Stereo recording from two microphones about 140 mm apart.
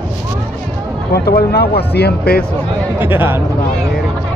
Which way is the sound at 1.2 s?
90° left.